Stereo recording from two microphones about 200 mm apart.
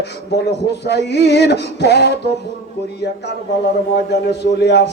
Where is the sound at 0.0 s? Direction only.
55° left (ahead or behind).